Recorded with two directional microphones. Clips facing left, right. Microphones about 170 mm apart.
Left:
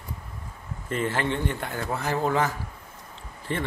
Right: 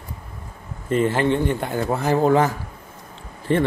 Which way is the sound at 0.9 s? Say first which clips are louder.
Right 8 dB; 25° right (ahead or behind).